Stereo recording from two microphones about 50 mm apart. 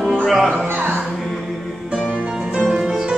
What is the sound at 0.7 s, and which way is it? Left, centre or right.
Music, right.